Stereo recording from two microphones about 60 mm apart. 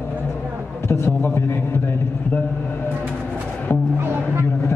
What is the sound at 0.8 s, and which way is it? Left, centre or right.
Speech, left.